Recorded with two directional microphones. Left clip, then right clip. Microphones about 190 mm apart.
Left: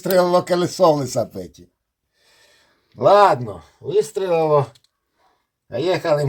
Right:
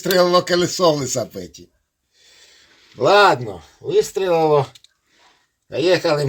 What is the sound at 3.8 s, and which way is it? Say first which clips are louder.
Speech: right 2 dB; 25° left (ahead or behind).